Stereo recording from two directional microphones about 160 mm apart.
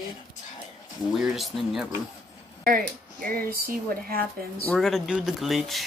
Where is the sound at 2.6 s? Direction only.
65° right (ahead or behind).